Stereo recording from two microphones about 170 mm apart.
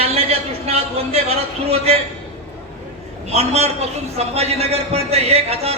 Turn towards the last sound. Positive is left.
turn(degrees=-35)  # may be behind; listen again after turning